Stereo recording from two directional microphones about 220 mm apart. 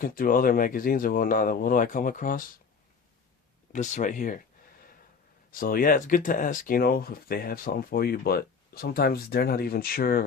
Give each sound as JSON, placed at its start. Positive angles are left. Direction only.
{"t": 0.0, "sound": "speech", "side_deg": 40}
{"t": 3.7, "sound": "speech", "side_deg": 35}
{"t": 5.5, "sound": "speech", "side_deg": 40}